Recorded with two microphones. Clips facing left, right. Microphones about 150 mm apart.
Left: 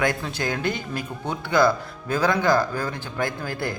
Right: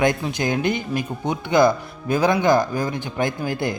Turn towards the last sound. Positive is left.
turn(degrees=-20)  # may be behind; listen again after turning